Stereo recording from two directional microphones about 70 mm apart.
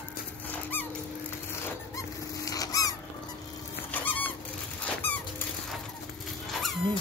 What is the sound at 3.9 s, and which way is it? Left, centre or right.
Goose, left.